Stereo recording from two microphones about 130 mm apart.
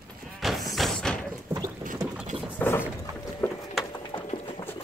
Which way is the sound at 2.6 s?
15° left (ahead or behind).